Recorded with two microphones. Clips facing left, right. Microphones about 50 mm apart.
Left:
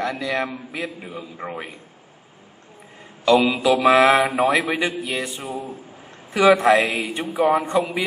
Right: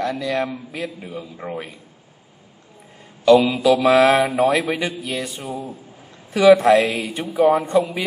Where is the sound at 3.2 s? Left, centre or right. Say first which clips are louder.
Right 3 dB; left.